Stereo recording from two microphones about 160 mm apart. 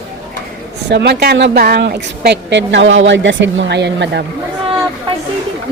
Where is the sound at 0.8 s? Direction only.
90° right.